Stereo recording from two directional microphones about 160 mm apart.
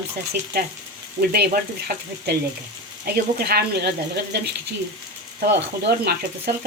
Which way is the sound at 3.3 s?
75° right (ahead or behind).